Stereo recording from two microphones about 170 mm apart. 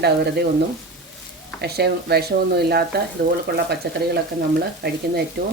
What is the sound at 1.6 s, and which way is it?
Speech, 70° right (ahead or behind).